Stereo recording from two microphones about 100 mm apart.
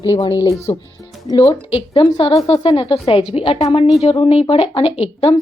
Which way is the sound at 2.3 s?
35° left (ahead or behind).